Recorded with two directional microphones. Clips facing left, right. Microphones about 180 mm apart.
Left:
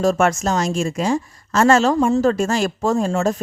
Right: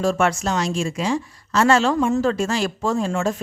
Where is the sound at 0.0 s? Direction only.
45° left (ahead or behind).